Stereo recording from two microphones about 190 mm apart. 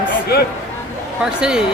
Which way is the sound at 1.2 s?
5° right (ahead or behind).